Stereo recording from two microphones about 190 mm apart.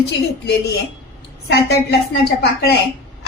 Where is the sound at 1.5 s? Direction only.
60° left (ahead or behind).